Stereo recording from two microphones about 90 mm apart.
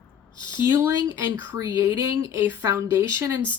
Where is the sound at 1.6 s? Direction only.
35° right (ahead or behind).